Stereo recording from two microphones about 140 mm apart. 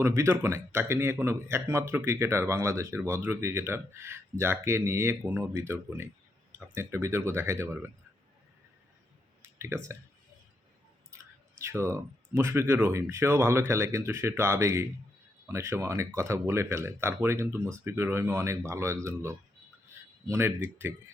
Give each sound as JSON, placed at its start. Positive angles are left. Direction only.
{"t": 0.0, "sound": "speech", "side_deg": -20}
{"t": 9.6, "sound": "speech", "side_deg": -20}
{"t": 11.1, "sound": "clicking", "side_deg": -20}
{"t": 11.6, "sound": "speech", "side_deg": -20}